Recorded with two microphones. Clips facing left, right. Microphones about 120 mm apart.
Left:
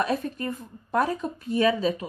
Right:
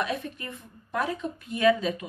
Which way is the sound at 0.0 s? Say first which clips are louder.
Left 5 dB; 40° left (ahead or behind).